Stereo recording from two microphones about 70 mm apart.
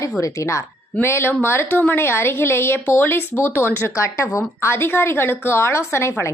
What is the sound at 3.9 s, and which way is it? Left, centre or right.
Speech, left.